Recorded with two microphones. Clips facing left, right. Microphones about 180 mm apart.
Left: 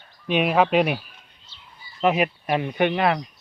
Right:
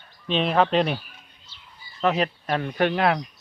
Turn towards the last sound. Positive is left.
turn(degrees=0)  # may be behind; listen again after turning